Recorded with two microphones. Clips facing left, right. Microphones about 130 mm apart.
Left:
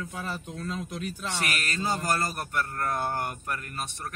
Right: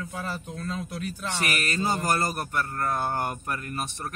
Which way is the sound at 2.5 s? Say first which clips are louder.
Right 1 dB; 25° right (ahead or behind).